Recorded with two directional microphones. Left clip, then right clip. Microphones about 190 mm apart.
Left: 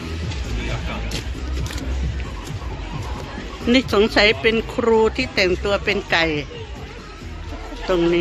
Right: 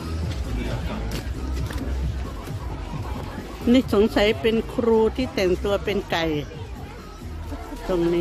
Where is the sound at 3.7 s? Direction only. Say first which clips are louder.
Left 3 dB; 15° right (ahead or behind).